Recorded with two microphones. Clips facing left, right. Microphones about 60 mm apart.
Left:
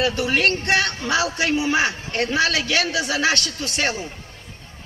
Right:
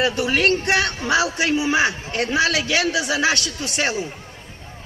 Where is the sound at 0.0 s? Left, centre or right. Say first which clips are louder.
Right 1 dB; right.